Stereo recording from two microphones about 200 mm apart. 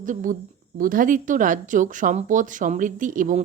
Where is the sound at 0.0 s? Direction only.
40° right (ahead or behind).